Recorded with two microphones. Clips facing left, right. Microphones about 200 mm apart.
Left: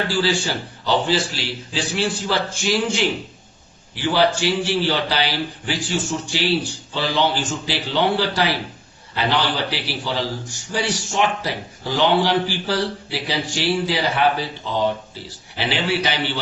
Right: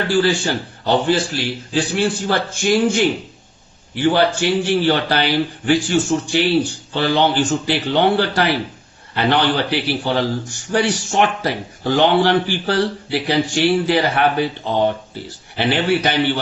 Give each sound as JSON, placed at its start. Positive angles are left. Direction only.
{"t": 0.2, "sound": "a man's voice", "side_deg": -55}